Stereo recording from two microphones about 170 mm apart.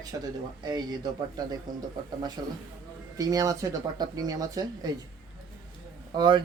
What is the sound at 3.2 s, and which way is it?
Speech, 20° right (ahead or behind).